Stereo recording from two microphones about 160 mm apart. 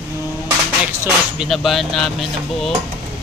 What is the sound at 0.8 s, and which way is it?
Speech, 5° right (ahead or behind).